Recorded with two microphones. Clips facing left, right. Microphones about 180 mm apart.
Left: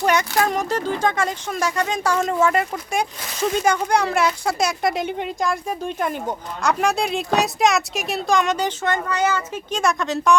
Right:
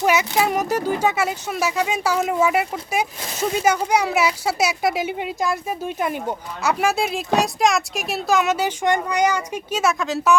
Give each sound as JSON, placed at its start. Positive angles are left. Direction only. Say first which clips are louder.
{"t": 0.0, "sound": "speech", "louder": "even", "side_deg": -5}